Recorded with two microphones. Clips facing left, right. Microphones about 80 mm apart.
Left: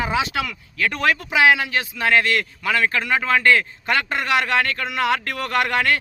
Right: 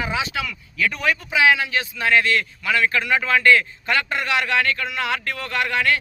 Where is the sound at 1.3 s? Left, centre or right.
Left.